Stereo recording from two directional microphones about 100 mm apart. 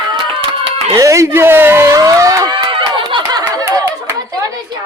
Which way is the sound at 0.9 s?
30° right (ahead or behind).